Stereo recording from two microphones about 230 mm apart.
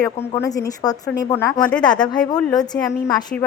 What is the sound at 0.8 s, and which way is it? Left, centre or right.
Speech, centre.